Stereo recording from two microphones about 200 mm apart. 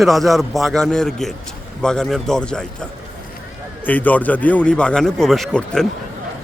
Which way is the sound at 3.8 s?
10° left (ahead or behind).